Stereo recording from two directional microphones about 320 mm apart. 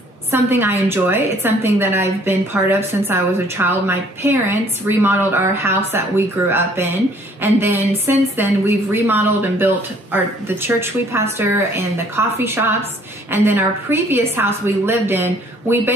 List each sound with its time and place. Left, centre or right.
0.3 s a woman's voice: centre